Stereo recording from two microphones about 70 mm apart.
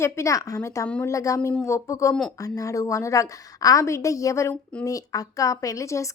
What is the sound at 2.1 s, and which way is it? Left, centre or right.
Speech, centre.